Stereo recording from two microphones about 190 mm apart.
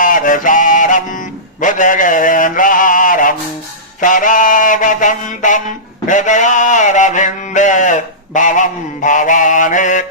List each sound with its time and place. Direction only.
0.0 s mantra: 45° left (ahead or behind)